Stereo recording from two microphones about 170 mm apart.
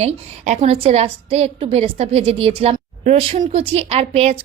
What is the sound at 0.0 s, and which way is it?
A woman's voice, 40° right (ahead or behind).